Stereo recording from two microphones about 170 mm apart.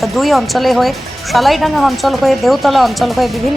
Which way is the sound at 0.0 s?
Centre (ahead or behind).